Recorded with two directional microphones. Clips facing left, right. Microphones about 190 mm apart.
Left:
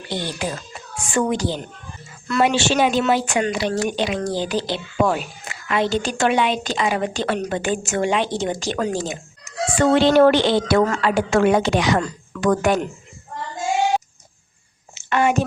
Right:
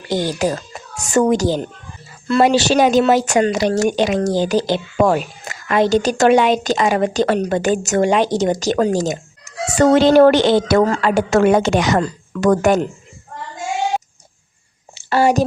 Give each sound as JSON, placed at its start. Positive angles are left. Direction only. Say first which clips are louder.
{"t": 0.1, "sound": "a child's voice", "louder": "right 8 dB", "side_deg": -40}
{"t": 2.2, "sound": "a woman's voice", "louder": "right 5 dB", "side_deg": -30}
{"t": 14.9, "sound": "a sound", "louder": "right 4 dB", "side_deg": -35}